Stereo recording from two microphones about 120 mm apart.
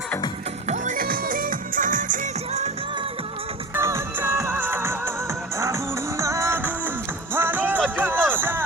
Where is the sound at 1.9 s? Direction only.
90° right.